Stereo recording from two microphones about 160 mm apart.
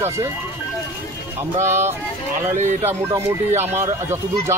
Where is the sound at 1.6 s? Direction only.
15° right (ahead or behind).